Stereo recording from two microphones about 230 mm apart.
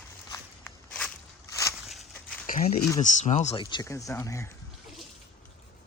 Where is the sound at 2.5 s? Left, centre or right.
Left.